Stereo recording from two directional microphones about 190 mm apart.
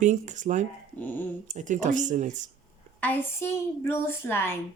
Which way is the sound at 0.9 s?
10° left (ahead or behind).